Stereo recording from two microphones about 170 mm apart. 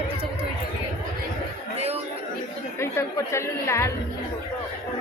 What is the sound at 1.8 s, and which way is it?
Chatter, 35° right (ahead or behind).